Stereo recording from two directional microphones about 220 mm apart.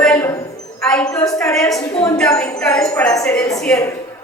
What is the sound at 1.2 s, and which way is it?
Speech, 15° left (ahead or behind).